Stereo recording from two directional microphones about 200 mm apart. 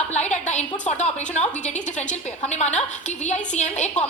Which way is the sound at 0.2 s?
35° left (ahead or behind).